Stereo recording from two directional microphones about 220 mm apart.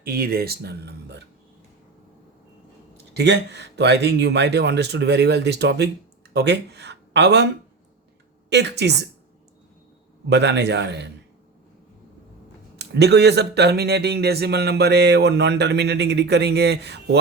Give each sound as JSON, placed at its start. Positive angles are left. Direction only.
{"t": 0.0, "sound": "speech", "side_deg": -45}
{"t": 3.2, "sound": "speech", "side_deg": -50}
{"t": 8.4, "sound": "speech", "side_deg": -50}
{"t": 10.2, "sound": "speech", "side_deg": -50}
{"t": 12.7, "sound": "speech", "side_deg": -50}